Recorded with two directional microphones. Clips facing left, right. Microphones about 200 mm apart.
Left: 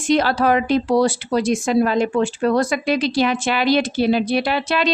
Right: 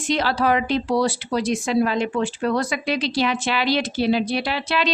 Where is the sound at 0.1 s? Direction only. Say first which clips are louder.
Left 4 dB; 50° left (ahead or behind).